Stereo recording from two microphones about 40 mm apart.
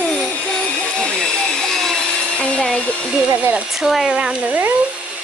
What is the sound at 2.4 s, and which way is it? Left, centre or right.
Hair dryer, left.